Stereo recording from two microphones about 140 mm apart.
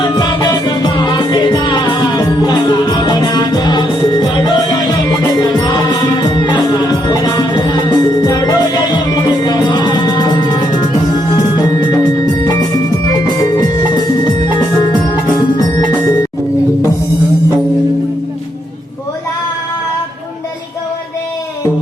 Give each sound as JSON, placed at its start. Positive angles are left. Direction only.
{"t": 0.2, "sound": "music", "side_deg": 30}
{"t": 15.4, "sound": "music", "side_deg": 30}